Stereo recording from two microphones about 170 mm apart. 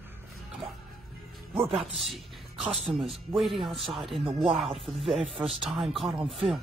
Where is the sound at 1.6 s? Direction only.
35° right (ahead or behind).